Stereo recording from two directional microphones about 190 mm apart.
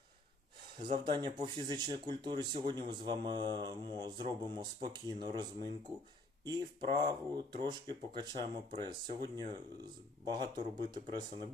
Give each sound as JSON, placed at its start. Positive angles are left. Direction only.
{"t": 0.8, "sound": "speech", "side_deg": -25}